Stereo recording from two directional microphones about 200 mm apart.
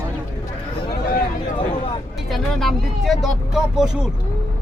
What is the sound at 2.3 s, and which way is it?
Speech, centre (ahead or behind).